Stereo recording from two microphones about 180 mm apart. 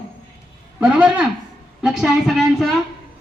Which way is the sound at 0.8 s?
5° right (ahead or behind).